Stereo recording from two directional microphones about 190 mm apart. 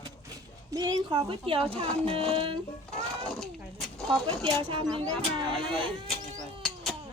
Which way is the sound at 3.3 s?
5° left (ahead or behind).